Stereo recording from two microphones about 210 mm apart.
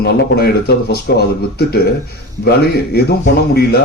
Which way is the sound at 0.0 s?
50° left (ahead or behind).